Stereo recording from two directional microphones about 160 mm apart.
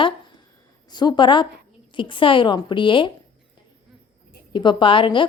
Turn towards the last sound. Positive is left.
turn(degrees=30)  # may be behind; listen again after turning